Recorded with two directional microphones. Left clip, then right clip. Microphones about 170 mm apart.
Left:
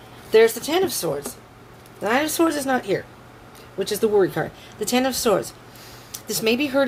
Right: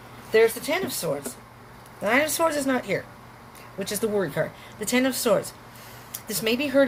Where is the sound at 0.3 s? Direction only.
50° left (ahead or behind).